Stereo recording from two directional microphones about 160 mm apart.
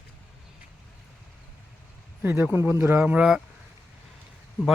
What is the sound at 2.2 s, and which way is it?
Speech, 10° right (ahead or behind).